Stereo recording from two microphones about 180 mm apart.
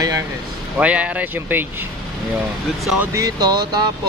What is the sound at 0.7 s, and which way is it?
Speech, 5° right (ahead or behind).